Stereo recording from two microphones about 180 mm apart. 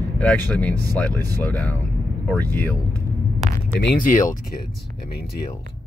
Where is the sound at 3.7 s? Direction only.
55° left (ahead or behind).